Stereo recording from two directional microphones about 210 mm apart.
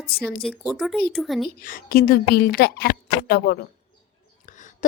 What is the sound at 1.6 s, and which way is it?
A woman's voice, 45° left (ahead or behind).